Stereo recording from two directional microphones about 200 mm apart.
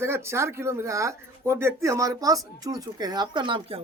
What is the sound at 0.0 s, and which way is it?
Speech, 10° right (ahead or behind).